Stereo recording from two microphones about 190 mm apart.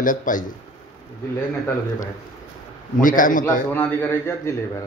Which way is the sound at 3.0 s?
45° left (ahead or behind).